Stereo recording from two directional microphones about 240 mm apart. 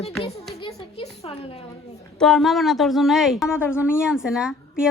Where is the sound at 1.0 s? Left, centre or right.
Left.